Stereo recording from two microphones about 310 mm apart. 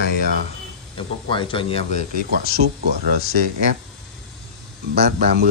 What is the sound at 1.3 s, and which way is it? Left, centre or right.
Speech, centre.